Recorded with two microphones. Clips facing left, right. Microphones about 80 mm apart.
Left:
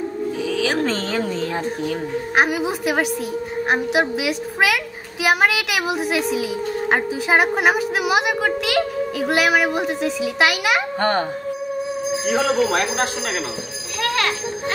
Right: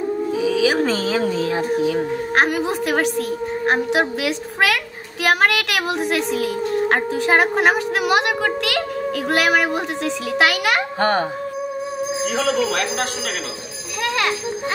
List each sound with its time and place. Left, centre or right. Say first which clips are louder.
0.4 s a child's voice: right 3 dB; centre
2.3 s a child's voice: even; centre
12.3 s speech: left 3 dB; left
14.0 s bicycle bell: even; centre